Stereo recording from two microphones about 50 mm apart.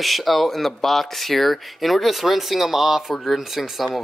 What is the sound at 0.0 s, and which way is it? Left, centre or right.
Speech, centre.